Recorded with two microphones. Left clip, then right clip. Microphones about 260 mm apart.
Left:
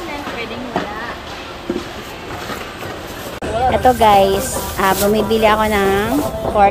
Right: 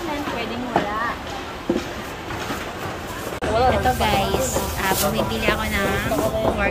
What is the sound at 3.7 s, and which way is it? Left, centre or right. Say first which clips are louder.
Speech: left 9 dB; centre.